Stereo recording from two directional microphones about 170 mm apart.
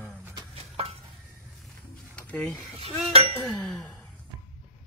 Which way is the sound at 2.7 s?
35° right (ahead or behind).